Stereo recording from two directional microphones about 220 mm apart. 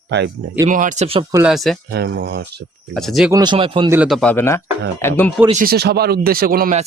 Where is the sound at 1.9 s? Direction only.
50° right (ahead or behind).